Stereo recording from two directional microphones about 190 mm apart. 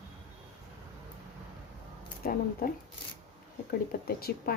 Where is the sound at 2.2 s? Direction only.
50° left (ahead or behind).